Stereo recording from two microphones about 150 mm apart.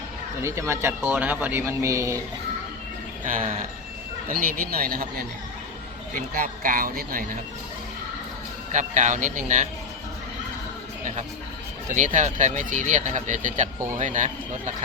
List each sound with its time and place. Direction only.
0.4 s speech: 20° right (ahead or behind)
3.2 s speech: 65° right (ahead or behind); by 5.2 s 85° right
6.1 s speech: 70° right (ahead or behind)
8.7 s speech: 55° right (ahead or behind)
11.0 s speech: 50° right (ahead or behind)